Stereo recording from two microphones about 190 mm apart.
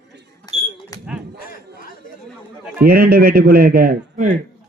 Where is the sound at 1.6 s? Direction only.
60° right (ahead or behind).